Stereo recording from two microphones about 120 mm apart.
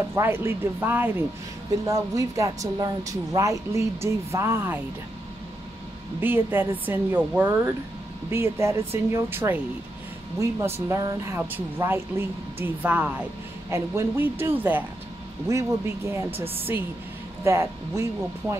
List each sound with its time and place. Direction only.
0.1 s speech: 20° right (ahead or behind)
1.9 s speech: 25° right (ahead or behind)
6.2 s speech: 15° right (ahead or behind)
13.7 s speech: 25° right (ahead or behind)